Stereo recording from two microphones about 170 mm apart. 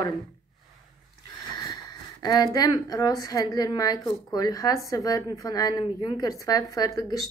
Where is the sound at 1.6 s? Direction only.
25° left (ahead or behind).